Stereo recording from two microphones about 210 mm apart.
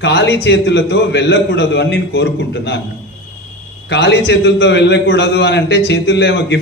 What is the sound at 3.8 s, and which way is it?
A man's voice, 55° left (ahead or behind).